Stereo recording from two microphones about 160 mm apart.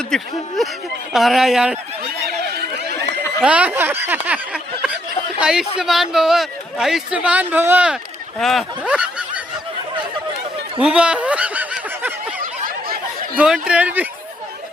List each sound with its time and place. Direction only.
0.1 s a man's voice: centre (ahead or behind)
3.4 s a man's voice: 10° right (ahead or behind)
8.4 s speech: centre (ahead or behind)
10.8 s snicker: 5° right (ahead or behind)
12.4 s snicker: 60° right (ahead or behind)
13.4 s speech: 5° right (ahead or behind)